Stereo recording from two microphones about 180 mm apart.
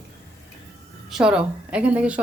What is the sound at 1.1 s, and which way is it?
A woman's voice, 5° right (ahead or behind).